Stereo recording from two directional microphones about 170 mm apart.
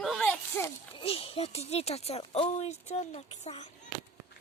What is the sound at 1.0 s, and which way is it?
Speech, 35° left (ahead or behind).